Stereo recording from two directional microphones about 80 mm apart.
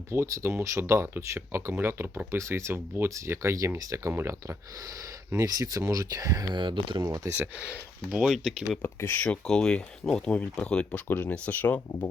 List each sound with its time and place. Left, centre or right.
0.1 s speech: right
6.5 s speech: right
7.0 s speech: right
7.3 s speech: centre
8.2 s speech: centre
8.8 s speech: left
9.2 s speech: centre